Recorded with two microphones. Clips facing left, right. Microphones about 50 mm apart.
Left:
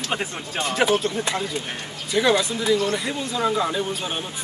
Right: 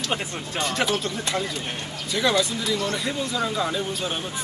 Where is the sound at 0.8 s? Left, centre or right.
Left.